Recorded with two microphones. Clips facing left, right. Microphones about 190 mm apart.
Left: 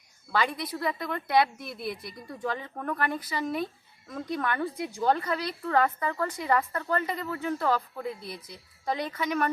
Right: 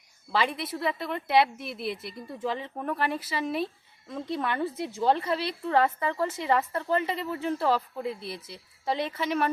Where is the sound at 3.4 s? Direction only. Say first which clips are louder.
Right 1 dB; 30° right (ahead or behind).